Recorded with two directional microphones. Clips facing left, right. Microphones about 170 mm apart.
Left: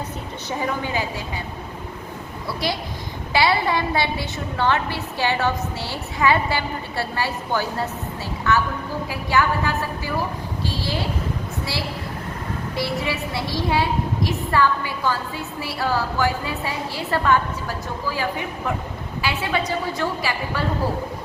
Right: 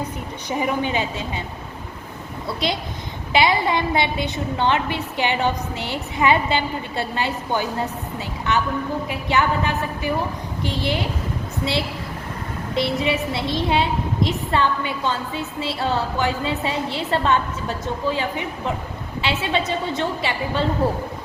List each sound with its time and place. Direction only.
0.6 s a woman's voice: 20° right (ahead or behind)
2.5 s a woman's voice: 20° right (ahead or behind)
12.7 s a woman's voice: 20° right (ahead or behind)